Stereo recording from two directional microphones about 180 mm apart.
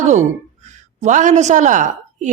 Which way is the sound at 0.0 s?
40° right (ahead or behind).